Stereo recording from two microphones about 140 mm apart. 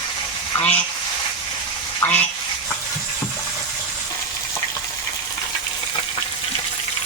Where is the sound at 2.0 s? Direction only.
15° left (ahead or behind).